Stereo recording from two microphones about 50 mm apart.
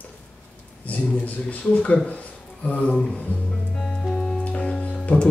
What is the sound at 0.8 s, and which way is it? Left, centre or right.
Speech, left.